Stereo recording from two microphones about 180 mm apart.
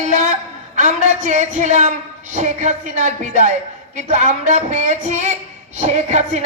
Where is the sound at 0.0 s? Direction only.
45° right (ahead or behind).